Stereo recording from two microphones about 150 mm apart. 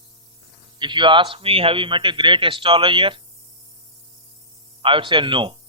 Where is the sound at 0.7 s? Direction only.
30° right (ahead or behind).